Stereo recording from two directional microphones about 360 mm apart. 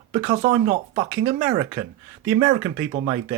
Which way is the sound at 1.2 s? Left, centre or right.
Centre.